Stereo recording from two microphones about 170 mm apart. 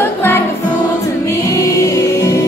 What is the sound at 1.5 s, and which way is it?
Music, 15° left (ahead or behind).